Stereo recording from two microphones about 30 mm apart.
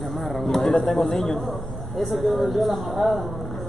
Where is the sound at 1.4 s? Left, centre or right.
Centre.